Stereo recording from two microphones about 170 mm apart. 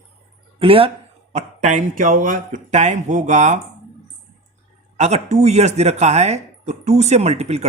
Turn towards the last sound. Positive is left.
turn(degrees=-40)  # may be behind; listen again after turning